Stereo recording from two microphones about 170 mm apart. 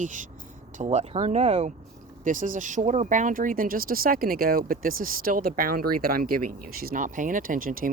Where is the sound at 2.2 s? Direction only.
50° right (ahead or behind).